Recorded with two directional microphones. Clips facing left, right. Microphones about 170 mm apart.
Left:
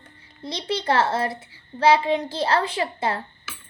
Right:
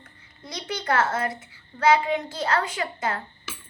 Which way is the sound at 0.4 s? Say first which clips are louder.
Left 4 dB; 30° left (ahead or behind).